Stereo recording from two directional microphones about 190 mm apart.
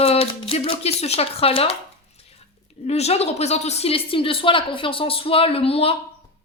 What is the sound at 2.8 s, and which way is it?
A woman's voice, 35° left (ahead or behind).